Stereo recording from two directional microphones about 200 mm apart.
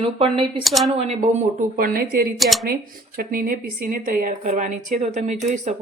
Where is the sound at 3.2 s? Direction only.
45° right (ahead or behind).